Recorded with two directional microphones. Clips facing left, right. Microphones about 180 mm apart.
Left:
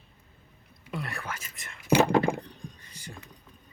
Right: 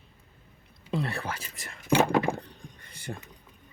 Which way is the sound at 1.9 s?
15° left (ahead or behind).